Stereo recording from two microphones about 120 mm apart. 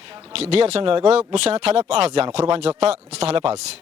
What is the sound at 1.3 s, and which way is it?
Speech, 65° right (ahead or behind).